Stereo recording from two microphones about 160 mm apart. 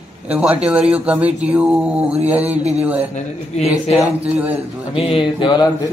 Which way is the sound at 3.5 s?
40° left (ahead or behind).